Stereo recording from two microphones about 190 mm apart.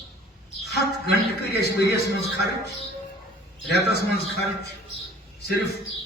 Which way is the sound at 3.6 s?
60° left (ahead or behind).